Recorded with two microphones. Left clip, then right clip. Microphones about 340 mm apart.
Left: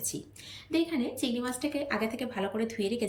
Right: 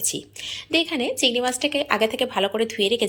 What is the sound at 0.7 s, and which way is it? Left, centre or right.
A woman's voice, right.